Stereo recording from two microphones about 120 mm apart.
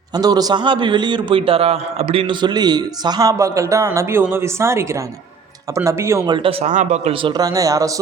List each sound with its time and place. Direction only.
0.2 s a man's voice: 35° right (ahead or behind)
6.2 s speech: 45° right (ahead or behind)
6.7 s speech: 85° right
7.1 s speech: 45° right (ahead or behind)
7.4 s speech: 30° right (ahead or behind)